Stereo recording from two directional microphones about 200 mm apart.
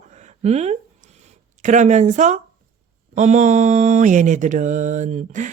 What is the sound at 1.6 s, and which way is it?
Mantra, 35° right (ahead or behind).